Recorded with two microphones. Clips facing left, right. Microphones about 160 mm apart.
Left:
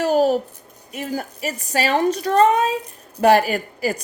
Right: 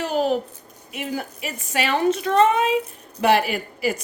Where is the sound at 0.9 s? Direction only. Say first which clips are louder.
Left 2 dB; 40° left (ahead or behind).